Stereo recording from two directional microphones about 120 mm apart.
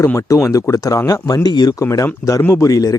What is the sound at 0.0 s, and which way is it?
Speech, 25° left (ahead or behind).